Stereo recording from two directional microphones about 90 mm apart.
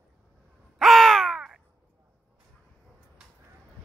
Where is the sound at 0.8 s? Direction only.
Centre (ahead or behind).